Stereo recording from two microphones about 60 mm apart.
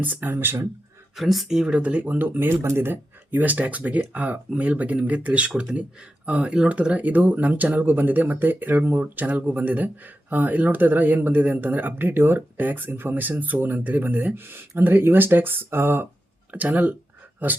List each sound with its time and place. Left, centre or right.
0.0 s speech: right
1.1 s speech: centre; by 2.1 s right
2.1 s speech: right
2.6 s speech: right
16.5 s speech: right